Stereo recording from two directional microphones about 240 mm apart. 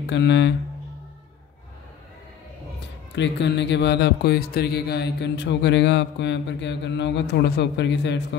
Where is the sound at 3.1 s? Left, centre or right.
Left.